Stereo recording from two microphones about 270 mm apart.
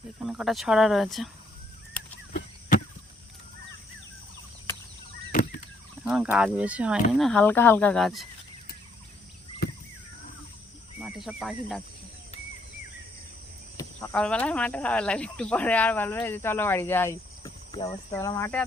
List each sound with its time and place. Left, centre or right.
0.3 s speech: centre
5.3 s a sound: left
6.1 s speech: centre
9.6 s a sound: left
11.0 s speech: centre
13.7 s speech: centre